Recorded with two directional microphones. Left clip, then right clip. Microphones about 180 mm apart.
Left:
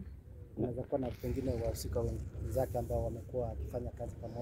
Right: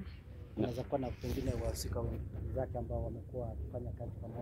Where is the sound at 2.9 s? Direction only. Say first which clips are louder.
Left 5 dB; 65° left (ahead or behind).